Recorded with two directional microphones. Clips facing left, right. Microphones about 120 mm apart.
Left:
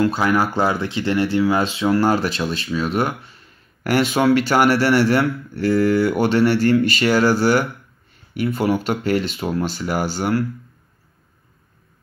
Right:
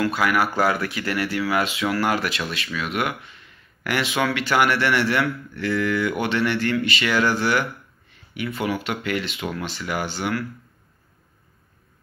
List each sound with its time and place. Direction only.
0.0 s speech: 30° left (ahead or behind)